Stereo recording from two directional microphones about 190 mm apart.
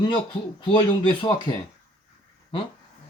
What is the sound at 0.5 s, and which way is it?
Speech, 25° left (ahead or behind).